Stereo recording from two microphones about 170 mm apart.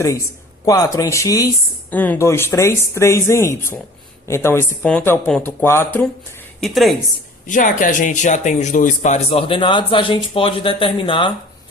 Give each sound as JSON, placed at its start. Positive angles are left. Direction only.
{"t": 0.6, "sound": "speech", "side_deg": 20}
{"t": 6.6, "sound": "a woman's voice", "side_deg": 0}
{"t": 7.4, "sound": "speech", "side_deg": 50}